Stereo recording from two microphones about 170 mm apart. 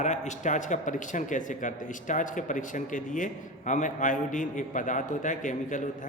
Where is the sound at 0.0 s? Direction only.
45° left (ahead or behind).